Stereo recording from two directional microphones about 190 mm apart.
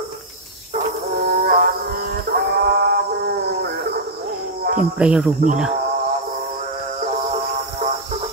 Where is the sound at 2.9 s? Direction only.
60° right (ahead or behind).